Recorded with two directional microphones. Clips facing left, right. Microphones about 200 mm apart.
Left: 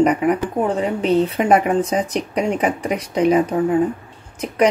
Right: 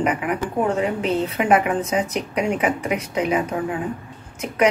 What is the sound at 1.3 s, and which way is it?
Speech, 35° left (ahead or behind).